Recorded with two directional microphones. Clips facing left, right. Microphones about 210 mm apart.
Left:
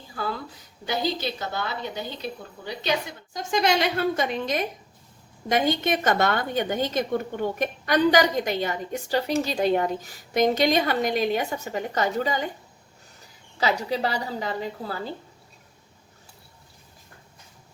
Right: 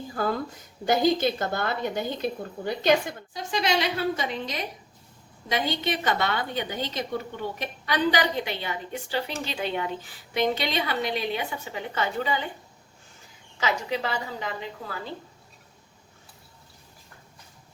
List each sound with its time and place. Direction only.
0.1 s a woman's voice: 45° right (ahead or behind)
3.3 s a woman's voice: 50° left (ahead or behind)
13.6 s speech: 35° left (ahead or behind)